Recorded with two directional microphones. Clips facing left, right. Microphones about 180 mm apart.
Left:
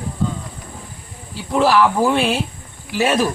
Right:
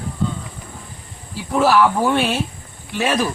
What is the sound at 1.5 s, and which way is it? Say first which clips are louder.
A man's voice: even; centre (ahead or behind).